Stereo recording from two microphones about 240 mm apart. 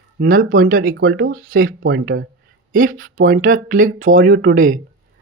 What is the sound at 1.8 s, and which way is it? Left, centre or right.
Speech, right.